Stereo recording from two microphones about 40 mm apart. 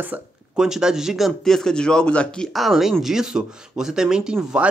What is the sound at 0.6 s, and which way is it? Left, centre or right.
Speech, centre.